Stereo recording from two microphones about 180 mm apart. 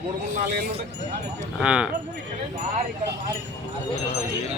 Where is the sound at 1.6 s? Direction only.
5° right (ahead or behind).